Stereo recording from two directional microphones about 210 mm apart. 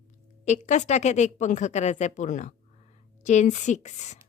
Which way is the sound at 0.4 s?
35° left (ahead or behind).